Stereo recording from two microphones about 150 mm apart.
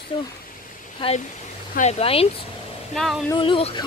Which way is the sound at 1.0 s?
35° left (ahead or behind).